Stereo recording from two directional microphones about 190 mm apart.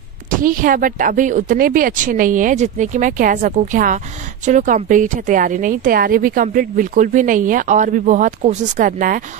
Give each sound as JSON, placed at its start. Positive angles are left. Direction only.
{"t": 0.4, "sound": "a woman's voice", "side_deg": -45}